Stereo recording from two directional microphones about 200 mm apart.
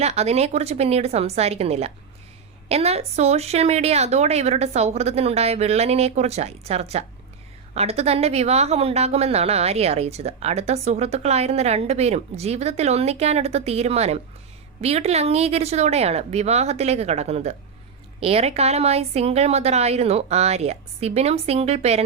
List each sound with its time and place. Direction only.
0.0 s a woman's voice: 30° right (ahead or behind)